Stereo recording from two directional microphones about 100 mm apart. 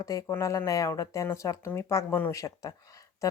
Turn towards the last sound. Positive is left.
turn(degrees=35)  # may be behind; listen again after turning